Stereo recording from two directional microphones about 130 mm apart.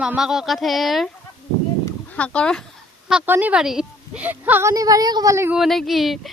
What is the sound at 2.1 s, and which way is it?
Speech, 10° left (ahead or behind).